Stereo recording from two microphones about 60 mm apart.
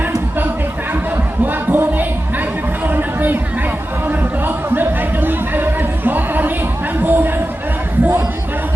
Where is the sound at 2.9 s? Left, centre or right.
Right.